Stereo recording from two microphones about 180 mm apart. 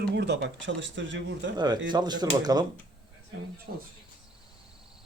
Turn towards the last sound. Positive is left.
turn(degrees=-60)  # may be behind; listen again after turning